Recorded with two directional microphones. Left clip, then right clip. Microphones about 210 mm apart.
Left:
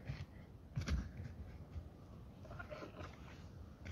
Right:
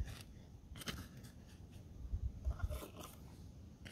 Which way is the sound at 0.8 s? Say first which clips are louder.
Right 1 dB; 25° right (ahead or behind).